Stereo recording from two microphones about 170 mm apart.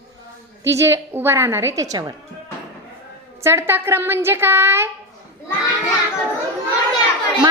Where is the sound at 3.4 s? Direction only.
15° right (ahead or behind).